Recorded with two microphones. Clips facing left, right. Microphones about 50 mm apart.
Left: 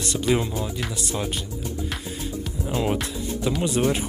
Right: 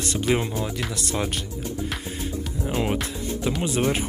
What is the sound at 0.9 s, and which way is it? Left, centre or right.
Speech, right.